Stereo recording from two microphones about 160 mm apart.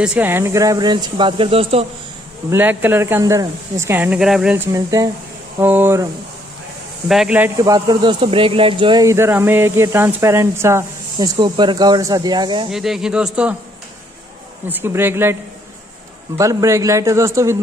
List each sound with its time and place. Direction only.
0.0 s a man's voice: 10° right (ahead or behind); by 1.9 s 35° right (ahead or behind)
2.5 s speech: 10° right (ahead or behind)
4.7 s a man's voice: 20° right (ahead or behind)
7.1 s a man's voice: 5° right (ahead or behind); by 9.0 s 30° right (ahead or behind)
9.0 s speech: 15° right (ahead or behind)
11.3 s a man's voice: 30° right (ahead or behind)
12.7 s a man's voice: 5° right (ahead or behind)
14.7 s speech: 15° right (ahead or behind)
16.3 s a man's voice: 20° right (ahead or behind)